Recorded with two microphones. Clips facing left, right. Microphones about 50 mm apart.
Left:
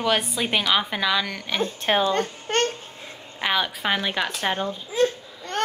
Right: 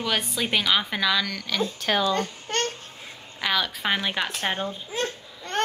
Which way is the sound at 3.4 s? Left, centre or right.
Left.